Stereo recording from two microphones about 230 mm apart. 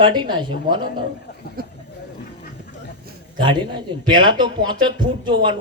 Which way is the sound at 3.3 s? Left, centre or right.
Right.